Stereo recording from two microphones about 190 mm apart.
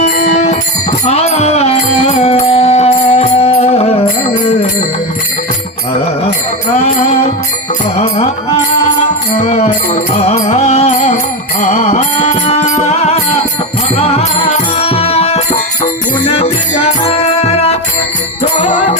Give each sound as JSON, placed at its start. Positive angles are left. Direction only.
{"t": 0.0, "sound": "music", "side_deg": 40}
{"t": 6.8, "sound": "music", "side_deg": 35}
{"t": 9.4, "sound": "music", "side_deg": 35}
{"t": 17.0, "sound": "music", "side_deg": 30}